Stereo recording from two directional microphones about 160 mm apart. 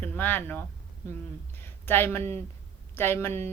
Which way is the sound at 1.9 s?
15° left (ahead or behind).